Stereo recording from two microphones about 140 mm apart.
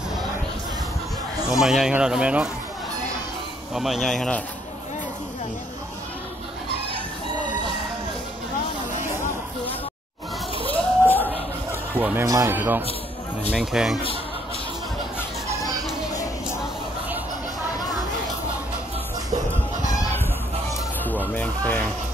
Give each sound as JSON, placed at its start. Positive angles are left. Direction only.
{"t": 1.5, "sound": "speech", "side_deg": -5}
{"t": 3.7, "sound": "speech", "side_deg": 0}
{"t": 10.7, "sound": "a sound", "side_deg": 15}
{"t": 12.0, "sound": "speech", "side_deg": -15}
{"t": 12.3, "sound": "a man's voice", "side_deg": -25}
{"t": 12.5, "sound": "speech", "side_deg": -15}
{"t": 21.3, "sound": "music", "side_deg": 10}